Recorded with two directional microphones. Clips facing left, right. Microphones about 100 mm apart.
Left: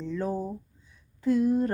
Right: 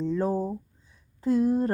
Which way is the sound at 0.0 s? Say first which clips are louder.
Right 4 dB; 35° right (ahead or behind).